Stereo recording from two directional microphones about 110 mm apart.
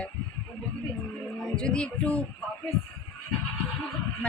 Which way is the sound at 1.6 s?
10° left (ahead or behind).